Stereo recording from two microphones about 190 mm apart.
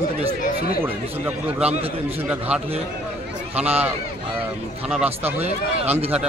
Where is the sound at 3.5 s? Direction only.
35° right (ahead or behind).